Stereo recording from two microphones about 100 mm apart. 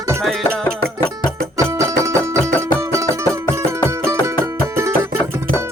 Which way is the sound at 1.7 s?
30° right (ahead or behind).